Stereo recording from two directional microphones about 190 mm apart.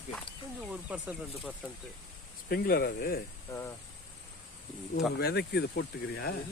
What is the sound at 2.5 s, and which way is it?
Speech, 55° left (ahead or behind).